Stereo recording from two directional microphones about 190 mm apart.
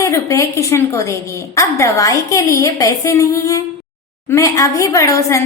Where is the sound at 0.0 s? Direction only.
15° left (ahead or behind).